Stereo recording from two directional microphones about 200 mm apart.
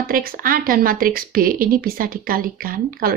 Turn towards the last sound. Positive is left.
turn(degrees=-45)  # may be behind; listen again after turning